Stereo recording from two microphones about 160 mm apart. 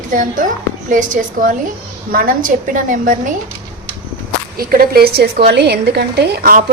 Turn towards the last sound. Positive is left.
turn(degrees=-65)  # may be behind; listen again after turning